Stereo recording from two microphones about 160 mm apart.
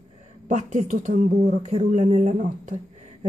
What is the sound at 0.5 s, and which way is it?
Speech, 50° right (ahead or behind).